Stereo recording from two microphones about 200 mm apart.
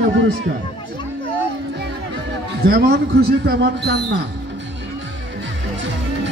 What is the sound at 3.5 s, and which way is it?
Speech, 55° right (ahead or behind).